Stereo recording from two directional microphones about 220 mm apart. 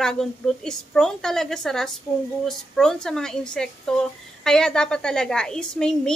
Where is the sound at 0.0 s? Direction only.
Centre (ahead or behind).